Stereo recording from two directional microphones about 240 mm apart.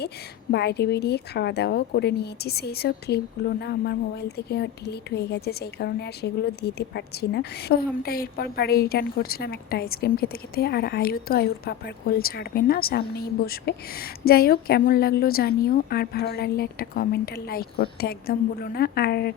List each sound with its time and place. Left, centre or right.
0.5 s a woman's voice: left